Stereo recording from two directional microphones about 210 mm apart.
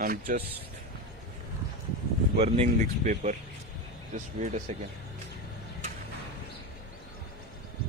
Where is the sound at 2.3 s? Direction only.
30° right (ahead or behind).